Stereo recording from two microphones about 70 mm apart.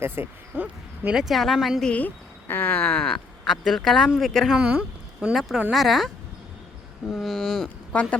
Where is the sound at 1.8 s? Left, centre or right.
Centre.